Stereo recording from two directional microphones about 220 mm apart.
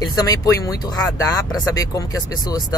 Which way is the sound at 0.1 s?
15° left (ahead or behind).